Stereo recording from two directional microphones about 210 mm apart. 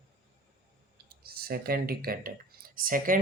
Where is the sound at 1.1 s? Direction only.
45° right (ahead or behind).